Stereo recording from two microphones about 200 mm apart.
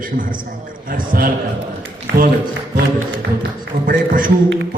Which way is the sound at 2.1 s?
65° right (ahead or behind).